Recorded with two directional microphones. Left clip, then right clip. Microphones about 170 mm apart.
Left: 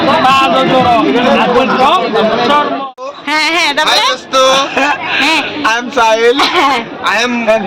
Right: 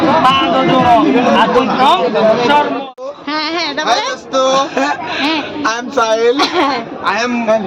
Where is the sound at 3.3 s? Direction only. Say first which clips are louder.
Left 7 dB; 10° left (ahead or behind).